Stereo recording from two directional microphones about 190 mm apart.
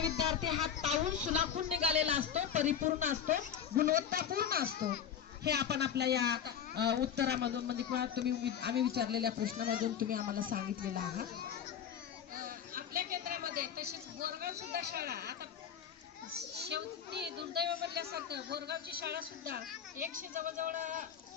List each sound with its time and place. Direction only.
0.3 s a woman's voice: 30° right (ahead or behind); by 11.3 s 50° right (ahead or behind)
12.3 s a sound: 50° right (ahead or behind)
16.6 s a man's voice: 60° right (ahead or behind); by 21.0 s 40° right (ahead or behind)